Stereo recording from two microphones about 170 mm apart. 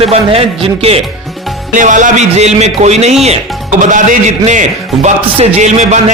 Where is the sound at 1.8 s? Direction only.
50° right (ahead or behind).